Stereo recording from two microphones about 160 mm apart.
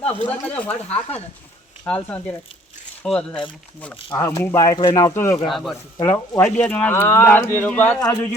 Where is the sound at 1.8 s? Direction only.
10° left (ahead or behind).